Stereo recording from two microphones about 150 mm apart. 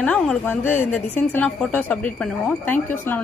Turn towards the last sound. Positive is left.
turn(degrees=15)  # may be behind; listen again after turning